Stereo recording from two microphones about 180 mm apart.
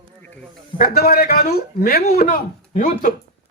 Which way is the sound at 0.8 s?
60° left (ahead or behind).